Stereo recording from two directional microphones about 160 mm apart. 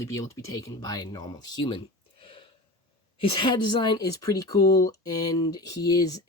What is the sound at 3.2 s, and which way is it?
Speech, 30° left (ahead or behind).